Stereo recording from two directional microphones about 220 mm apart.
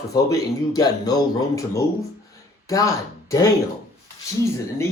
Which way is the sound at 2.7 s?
15° left (ahead or behind).